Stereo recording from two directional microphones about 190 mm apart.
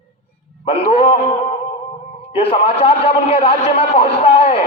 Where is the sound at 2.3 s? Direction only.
30° left (ahead or behind).